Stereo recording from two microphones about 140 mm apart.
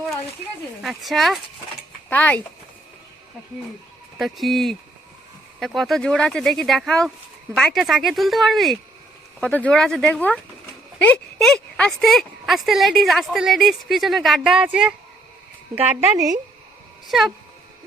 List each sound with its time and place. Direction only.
0.8 s speech: centre (ahead or behind)
2.0 s speech: 10° left (ahead or behind)
4.2 s speech: centre (ahead or behind); by 16.2 s 15° right (ahead or behind)
17.1 s speech: centre (ahead or behind)